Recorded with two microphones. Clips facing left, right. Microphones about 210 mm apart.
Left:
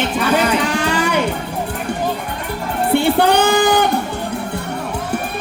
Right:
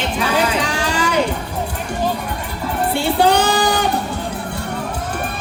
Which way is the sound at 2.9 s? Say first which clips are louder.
Left 10 dB; 55° left (ahead or behind).